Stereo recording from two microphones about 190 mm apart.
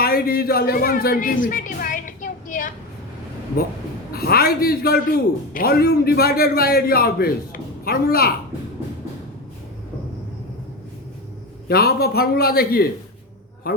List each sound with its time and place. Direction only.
0.0 s a sound: 55° left (ahead or behind)
4.1 s a man's voice: 55° left (ahead or behind)
11.7 s a man's voice: 55° left (ahead or behind)